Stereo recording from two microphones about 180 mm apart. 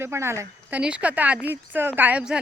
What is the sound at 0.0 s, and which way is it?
Speech, 15° right (ahead or behind).